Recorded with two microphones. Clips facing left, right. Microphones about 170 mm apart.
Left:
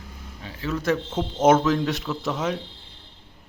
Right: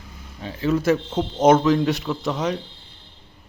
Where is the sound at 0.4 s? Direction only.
25° right (ahead or behind).